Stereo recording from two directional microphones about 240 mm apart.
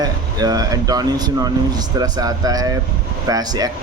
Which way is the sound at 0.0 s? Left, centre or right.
Centre.